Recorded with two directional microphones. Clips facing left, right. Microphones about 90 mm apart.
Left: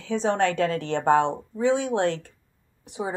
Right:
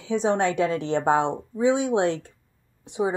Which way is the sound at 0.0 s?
15° right (ahead or behind).